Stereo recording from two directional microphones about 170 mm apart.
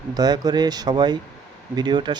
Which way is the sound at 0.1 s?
25° right (ahead or behind).